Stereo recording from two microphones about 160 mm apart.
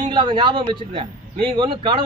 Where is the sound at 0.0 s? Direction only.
30° right (ahead or behind).